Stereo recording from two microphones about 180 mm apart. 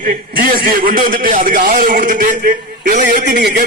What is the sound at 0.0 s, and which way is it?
A man's voice, 50° right (ahead or behind).